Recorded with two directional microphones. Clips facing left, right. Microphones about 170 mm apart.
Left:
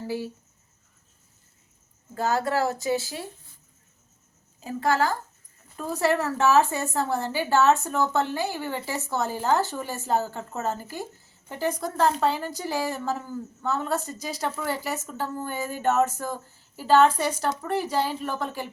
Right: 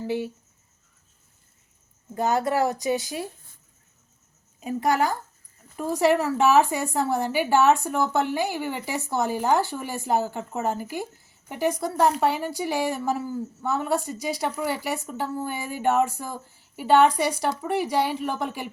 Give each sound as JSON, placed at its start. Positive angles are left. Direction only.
{"t": 2.1, "sound": "a woman's voice", "side_deg": -20}
{"t": 4.6, "sound": "a woman's voice", "side_deg": -15}